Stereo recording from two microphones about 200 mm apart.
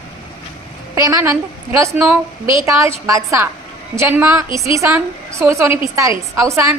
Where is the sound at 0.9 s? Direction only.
15° right (ahead or behind).